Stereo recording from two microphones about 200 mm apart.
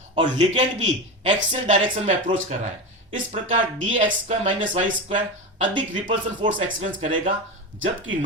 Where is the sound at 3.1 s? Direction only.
40° right (ahead or behind).